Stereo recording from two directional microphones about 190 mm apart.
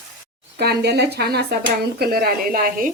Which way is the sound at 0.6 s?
60° right (ahead or behind).